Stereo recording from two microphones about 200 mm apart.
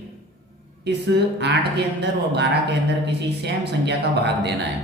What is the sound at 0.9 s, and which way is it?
Speech, 60° right (ahead or behind).